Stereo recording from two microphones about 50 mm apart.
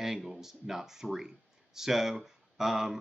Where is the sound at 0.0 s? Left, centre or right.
Centre.